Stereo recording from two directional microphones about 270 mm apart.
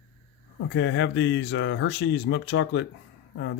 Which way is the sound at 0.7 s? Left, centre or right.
Left.